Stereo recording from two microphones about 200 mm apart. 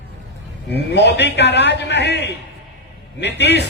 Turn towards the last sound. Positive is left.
turn(degrees=60)  # may be behind; listen again after turning